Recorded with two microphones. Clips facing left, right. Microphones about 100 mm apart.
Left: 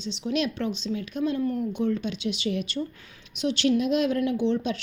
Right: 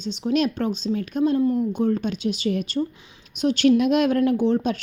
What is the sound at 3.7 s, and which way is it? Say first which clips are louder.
Speech: right 5 dB; 65° right (ahead or behind).